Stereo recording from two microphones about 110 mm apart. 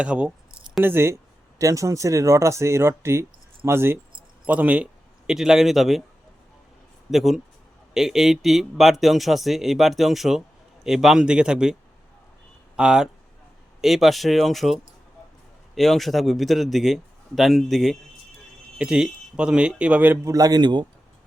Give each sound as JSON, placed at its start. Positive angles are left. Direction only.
{"t": 0.0, "sound": "keys jangling", "side_deg": -10}
{"t": 0.9, "sound": "a man's voice", "side_deg": -20}
{"t": 7.1, "sound": "speech", "side_deg": 0}
{"t": 20.2, "sound": "speech", "side_deg": -35}